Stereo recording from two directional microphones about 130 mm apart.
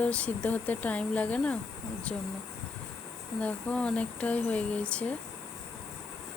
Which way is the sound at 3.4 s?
10° left (ahead or behind).